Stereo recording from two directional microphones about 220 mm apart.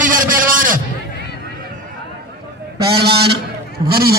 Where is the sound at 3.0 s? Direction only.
50° right (ahead or behind).